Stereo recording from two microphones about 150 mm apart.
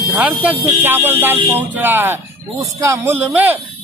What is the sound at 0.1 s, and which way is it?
Speech, 10° right (ahead or behind).